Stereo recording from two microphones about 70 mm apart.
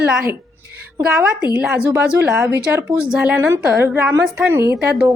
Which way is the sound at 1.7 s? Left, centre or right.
Centre.